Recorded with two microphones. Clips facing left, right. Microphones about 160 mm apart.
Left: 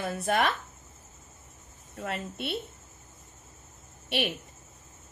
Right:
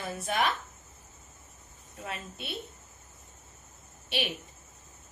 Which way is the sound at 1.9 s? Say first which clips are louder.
Left 5 dB; 65° left (ahead or behind).